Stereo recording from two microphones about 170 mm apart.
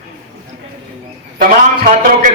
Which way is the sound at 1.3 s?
50° right (ahead or behind).